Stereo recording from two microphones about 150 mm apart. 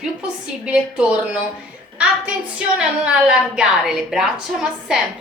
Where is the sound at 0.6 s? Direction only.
5° right (ahead or behind).